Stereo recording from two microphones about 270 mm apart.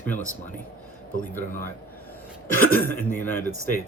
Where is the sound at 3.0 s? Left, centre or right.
Centre.